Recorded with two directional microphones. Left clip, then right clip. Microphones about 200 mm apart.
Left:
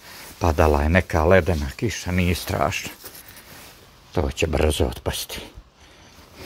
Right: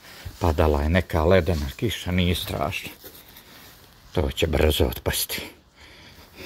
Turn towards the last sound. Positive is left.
turn(degrees=-5)  # may be behind; listen again after turning